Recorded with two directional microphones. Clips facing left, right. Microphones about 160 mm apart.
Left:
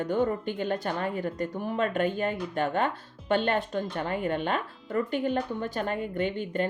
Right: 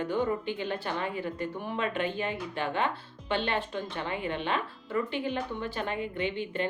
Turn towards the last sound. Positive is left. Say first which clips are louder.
# left 3 dB
turn(degrees=45)  # may be behind; listen again after turning